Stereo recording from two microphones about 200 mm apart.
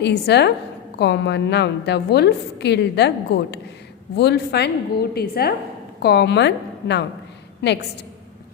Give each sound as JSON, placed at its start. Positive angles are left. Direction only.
{"t": 0.0, "sound": "a woman's voice", "side_deg": 55}
{"t": 4.1, "sound": "a woman's voice", "side_deg": 55}